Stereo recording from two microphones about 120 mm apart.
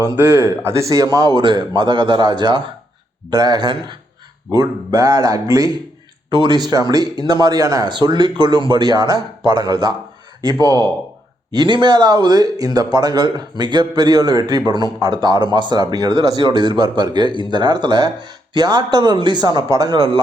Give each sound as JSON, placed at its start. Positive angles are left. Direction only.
{"t": 0.0, "sound": "a man's voice", "side_deg": -20}